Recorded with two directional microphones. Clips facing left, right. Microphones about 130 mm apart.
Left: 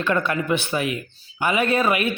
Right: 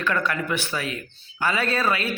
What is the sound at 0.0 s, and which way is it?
Speech, 20° left (ahead or behind).